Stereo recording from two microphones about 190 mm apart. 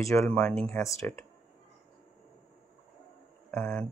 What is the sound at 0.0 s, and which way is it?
Speech, 15° left (ahead or behind).